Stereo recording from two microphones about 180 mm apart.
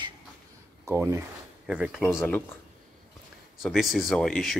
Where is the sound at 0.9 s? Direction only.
15° right (ahead or behind).